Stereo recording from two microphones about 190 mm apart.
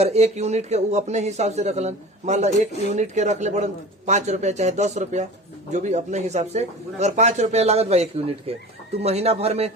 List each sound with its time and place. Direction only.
0.0 s speech: 35° right (ahead or behind)